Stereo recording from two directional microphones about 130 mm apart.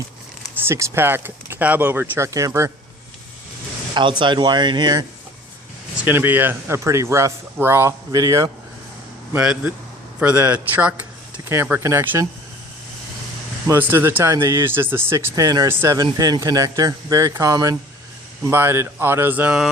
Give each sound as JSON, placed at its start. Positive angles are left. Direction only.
{"t": 0.7, "sound": "speech", "side_deg": -20}
{"t": 4.2, "sound": "speech", "side_deg": -35}
{"t": 6.1, "sound": "speech", "side_deg": -15}
{"t": 9.3, "sound": "speech", "side_deg": -10}
{"t": 13.7, "sound": "speech", "side_deg": -15}
{"t": 16.0, "sound": "speech", "side_deg": -30}